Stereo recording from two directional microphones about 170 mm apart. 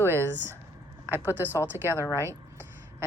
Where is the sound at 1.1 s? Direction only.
10° right (ahead or behind).